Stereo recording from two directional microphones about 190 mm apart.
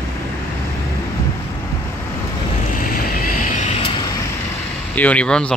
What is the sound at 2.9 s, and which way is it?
Vehicle, 50° left (ahead or behind).